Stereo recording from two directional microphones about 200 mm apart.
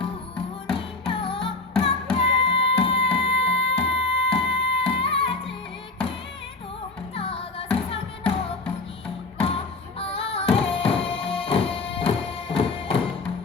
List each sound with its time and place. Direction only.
0.7 s music: 25° left (ahead or behind)
7.2 s music: 30° left (ahead or behind)